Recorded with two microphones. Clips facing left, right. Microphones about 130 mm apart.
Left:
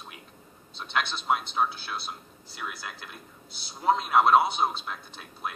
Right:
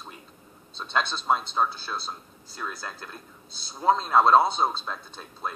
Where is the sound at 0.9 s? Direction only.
25° right (ahead or behind).